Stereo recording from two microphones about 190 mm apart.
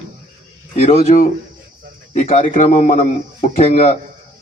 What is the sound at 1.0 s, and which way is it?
Speech, 45° left (ahead or behind).